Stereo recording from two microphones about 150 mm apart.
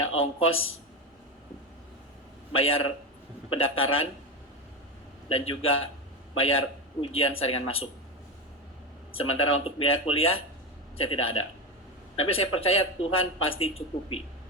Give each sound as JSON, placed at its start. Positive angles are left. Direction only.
{"t": 0.2, "sound": "speech", "side_deg": 40}
{"t": 2.6, "sound": "speech", "side_deg": 40}
{"t": 5.3, "sound": "a man's voice", "side_deg": 40}
{"t": 9.3, "sound": "speech", "side_deg": 40}